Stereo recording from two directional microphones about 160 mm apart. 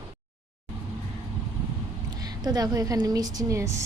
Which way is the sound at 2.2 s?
25° right (ahead or behind).